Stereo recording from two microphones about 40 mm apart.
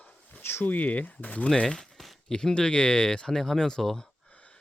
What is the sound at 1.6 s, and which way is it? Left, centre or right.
Speech, centre.